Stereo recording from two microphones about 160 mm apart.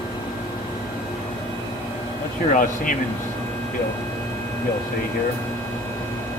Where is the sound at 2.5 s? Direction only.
55° left (ahead or behind).